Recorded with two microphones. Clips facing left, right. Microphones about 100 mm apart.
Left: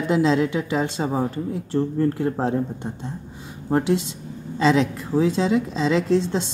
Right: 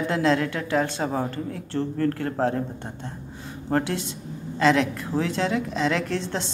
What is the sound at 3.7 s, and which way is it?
Speech, 15° left (ahead or behind).